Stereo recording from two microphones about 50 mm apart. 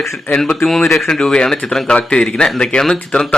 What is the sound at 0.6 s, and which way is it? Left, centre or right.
Speech, centre.